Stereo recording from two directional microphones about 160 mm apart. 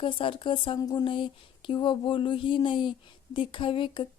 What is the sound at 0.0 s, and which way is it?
A woman's voice, 35° left (ahead or behind).